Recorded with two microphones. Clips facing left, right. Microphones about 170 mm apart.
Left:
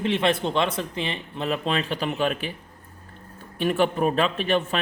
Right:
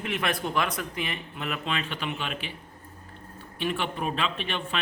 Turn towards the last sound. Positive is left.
turn(degrees=40)  # may be behind; listen again after turning